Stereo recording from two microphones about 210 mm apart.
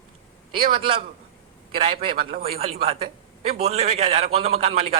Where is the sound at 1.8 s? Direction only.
25° right (ahead or behind).